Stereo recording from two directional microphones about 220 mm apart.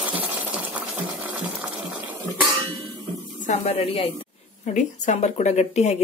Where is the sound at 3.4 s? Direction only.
30° left (ahead or behind).